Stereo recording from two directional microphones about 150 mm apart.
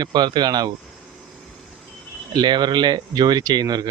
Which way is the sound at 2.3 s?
30° right (ahead or behind).